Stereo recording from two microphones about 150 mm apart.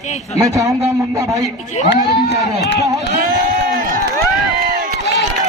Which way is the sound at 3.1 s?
65° right (ahead or behind).